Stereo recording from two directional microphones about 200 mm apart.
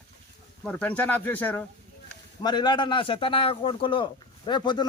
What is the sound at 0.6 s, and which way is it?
Speech, 5° left (ahead or behind).